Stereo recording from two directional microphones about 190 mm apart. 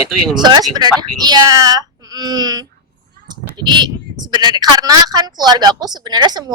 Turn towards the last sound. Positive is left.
turn(degrees=-20)  # may be behind; listen again after turning